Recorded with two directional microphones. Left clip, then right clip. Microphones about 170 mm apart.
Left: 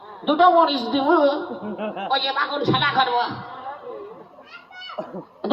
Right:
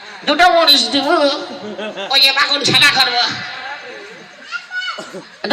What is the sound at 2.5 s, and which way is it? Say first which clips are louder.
Speech: right 8 dB; 30° right (ahead or behind).